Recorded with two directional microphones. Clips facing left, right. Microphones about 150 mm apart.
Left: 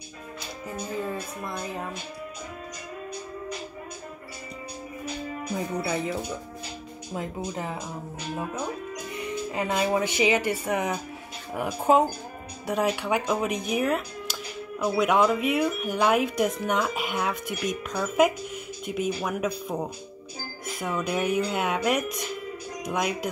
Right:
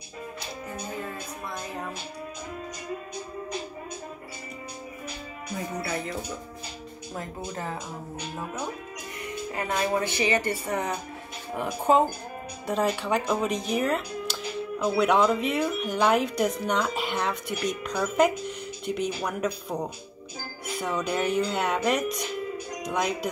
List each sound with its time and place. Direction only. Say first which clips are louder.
5.8 s speech: left 2 dB; 15° left (ahead or behind)
7.2 s speech: left 3 dB; 15° left (ahead or behind)
9.5 s speech: left 1 dB; 15° left (ahead or behind)
13.0 s speech: even; 5° left (ahead or behind)